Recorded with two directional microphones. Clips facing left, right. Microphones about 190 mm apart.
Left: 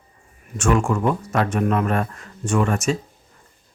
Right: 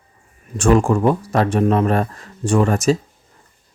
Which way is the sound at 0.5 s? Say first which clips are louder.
Right 5 dB; 35° right (ahead or behind).